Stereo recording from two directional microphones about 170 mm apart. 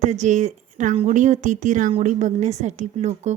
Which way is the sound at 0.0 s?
45° right (ahead or behind).